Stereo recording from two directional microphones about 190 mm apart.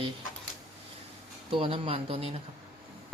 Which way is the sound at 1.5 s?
30° right (ahead or behind).